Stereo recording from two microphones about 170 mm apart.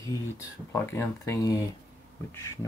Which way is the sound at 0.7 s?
15° left (ahead or behind).